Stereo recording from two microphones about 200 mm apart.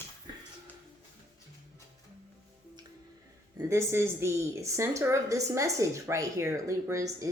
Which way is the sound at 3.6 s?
15° right (ahead or behind).